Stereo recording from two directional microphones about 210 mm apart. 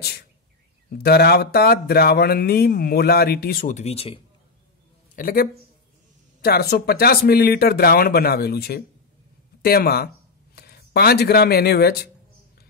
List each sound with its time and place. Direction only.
0.8 s speech: 50° left (ahead or behind); by 4.2 s 30° left (ahead or behind)
5.1 s speech: 45° left (ahead or behind)